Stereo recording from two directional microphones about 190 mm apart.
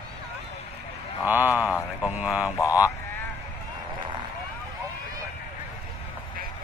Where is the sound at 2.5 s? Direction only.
15° left (ahead or behind).